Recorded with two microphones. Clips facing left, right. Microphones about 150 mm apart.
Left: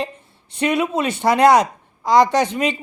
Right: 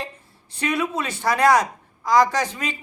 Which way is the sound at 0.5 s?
20° left (ahead or behind).